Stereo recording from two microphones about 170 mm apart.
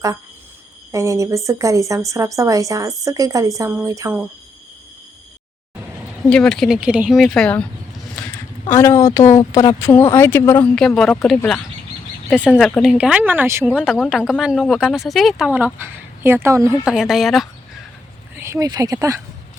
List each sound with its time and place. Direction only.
0.9 s speech: 20° right (ahead or behind)
6.2 s speech: 5° left (ahead or behind)
8.7 s speech: 15° left (ahead or behind); by 16.7 s 15° right (ahead or behind)
16.8 s speech: 5° right (ahead or behind)
18.3 s speech: 15° right (ahead or behind)